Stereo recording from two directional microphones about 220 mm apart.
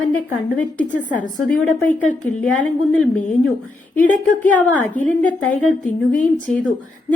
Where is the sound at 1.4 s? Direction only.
5° left (ahead or behind).